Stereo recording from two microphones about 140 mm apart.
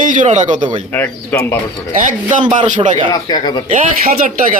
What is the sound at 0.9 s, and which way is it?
Speech, 15° left (ahead or behind).